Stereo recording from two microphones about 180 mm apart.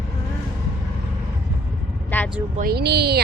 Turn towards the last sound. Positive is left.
turn(degrees=-65)  # may be behind; listen again after turning